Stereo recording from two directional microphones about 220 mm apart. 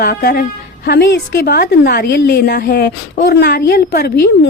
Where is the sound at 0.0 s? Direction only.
45° left (ahead or behind).